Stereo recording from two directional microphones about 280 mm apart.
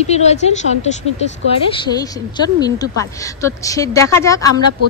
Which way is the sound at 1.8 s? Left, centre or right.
Centre.